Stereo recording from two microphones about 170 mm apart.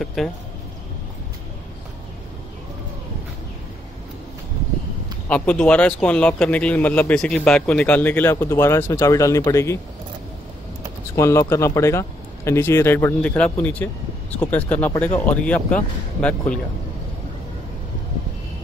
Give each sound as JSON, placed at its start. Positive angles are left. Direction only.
{"t": 0.0, "sound": "speech", "side_deg": 0}
{"t": 5.3, "sound": "speech", "side_deg": 10}
{"t": 11.1, "sound": "speech", "side_deg": 15}